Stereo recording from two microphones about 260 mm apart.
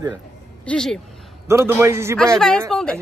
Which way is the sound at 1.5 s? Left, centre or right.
Centre.